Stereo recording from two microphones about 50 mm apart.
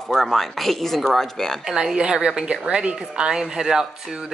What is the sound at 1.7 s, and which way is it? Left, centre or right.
A woman's voice, centre.